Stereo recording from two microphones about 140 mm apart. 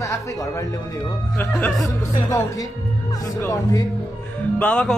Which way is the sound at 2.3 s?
25° left (ahead or behind).